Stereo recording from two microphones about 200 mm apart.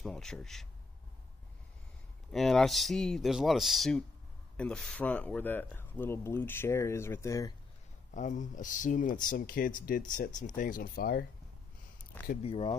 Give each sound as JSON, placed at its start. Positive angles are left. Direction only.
{"t": 0.0, "sound": "speech", "side_deg": 5}
{"t": 2.3, "sound": "speech", "side_deg": 0}
{"t": 8.1, "sound": "speech", "side_deg": 40}
{"t": 12.4, "sound": "speech", "side_deg": 25}